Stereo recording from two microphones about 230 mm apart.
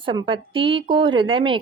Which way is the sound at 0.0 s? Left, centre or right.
Right.